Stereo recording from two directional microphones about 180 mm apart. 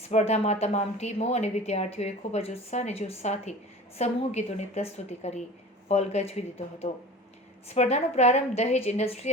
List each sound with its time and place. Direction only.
0.1 s a woman's voice: 40° left (ahead or behind)